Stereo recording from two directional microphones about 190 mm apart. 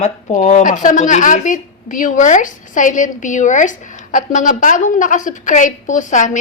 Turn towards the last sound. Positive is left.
turn(degrees=40)  # may be behind; listen again after turning